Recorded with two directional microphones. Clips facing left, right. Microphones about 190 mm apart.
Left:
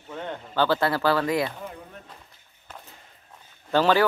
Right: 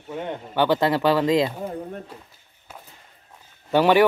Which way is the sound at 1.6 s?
40° right (ahead or behind).